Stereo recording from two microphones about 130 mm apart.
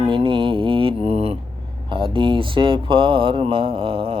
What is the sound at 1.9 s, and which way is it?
Speech, 40° right (ahead or behind).